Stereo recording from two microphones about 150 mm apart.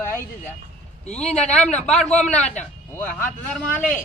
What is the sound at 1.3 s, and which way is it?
A man's voice, 5° left (ahead or behind).